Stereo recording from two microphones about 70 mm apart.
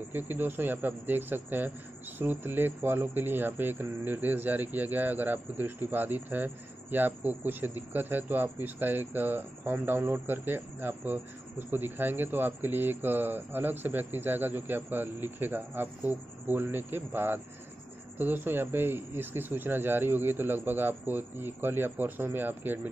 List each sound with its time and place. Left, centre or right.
0.1 s speech: right